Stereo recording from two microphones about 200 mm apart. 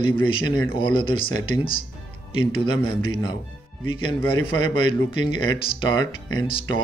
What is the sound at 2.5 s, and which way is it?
Speech, 25° left (ahead or behind).